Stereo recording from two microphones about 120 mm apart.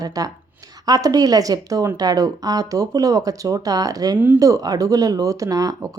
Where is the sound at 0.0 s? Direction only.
30° right (ahead or behind).